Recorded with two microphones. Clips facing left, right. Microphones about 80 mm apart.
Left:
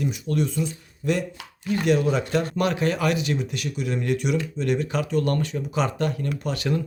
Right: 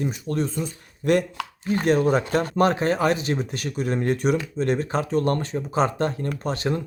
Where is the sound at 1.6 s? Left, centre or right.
Right.